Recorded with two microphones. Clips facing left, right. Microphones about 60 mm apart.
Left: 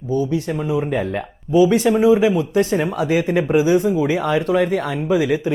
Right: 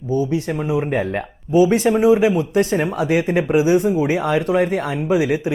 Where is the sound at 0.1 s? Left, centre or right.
Right.